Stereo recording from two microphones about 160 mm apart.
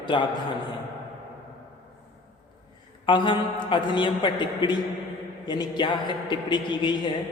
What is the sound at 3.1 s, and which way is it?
A man's voice, 30° left (ahead or behind).